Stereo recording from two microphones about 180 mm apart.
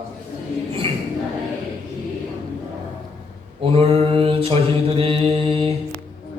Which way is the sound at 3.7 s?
30° right (ahead or behind).